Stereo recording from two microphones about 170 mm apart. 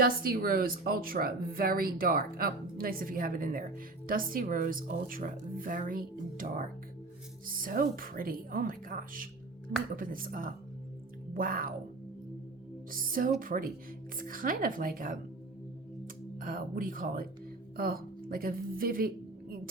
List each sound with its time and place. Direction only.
0.0 s a woman's voice: 60° right (ahead or behind)
12.9 s a woman's voice: 55° right (ahead or behind)
16.4 s a woman's voice: 55° right (ahead or behind)